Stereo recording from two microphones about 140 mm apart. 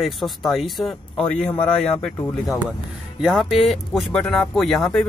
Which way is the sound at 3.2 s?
Centre (ahead or behind).